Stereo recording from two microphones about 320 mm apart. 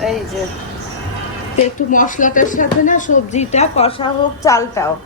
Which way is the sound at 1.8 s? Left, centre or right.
Left.